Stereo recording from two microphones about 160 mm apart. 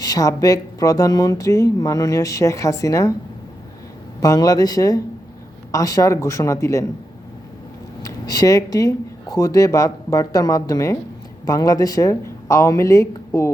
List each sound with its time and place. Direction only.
0.0 s speech: 25° left (ahead or behind)
4.2 s speech: 25° left (ahead or behind)
8.0 s speech: 20° left (ahead or behind)